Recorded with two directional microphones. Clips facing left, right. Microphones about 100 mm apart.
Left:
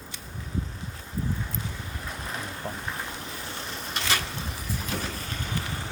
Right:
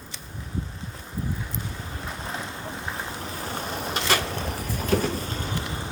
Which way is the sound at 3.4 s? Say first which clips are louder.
Right 6 dB; 50° right (ahead or behind).